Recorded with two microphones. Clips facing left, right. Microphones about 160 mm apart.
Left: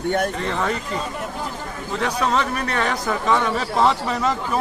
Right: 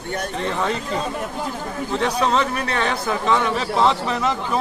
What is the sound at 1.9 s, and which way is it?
A man's voice, 30° right (ahead or behind).